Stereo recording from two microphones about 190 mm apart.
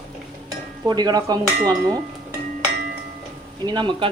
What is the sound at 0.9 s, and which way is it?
Speech, 20° right (ahead or behind).